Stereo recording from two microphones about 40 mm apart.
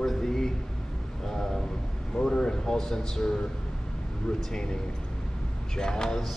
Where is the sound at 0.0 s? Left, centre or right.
Centre.